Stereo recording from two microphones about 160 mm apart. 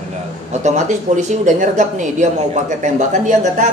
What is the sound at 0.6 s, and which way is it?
Speech, 50° right (ahead or behind).